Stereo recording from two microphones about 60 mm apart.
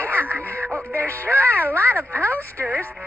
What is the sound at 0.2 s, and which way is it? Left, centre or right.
Music, right.